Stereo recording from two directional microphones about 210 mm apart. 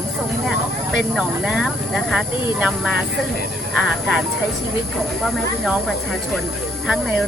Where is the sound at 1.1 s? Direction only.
Centre (ahead or behind).